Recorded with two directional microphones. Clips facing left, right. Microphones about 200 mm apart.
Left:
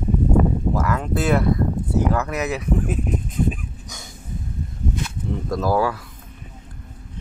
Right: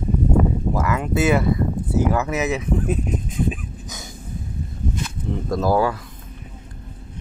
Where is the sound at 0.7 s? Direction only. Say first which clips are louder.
Right 1 dB; 5° right (ahead or behind).